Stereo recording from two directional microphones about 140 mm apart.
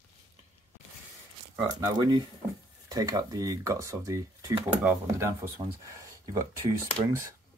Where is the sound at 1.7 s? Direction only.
25° right (ahead or behind).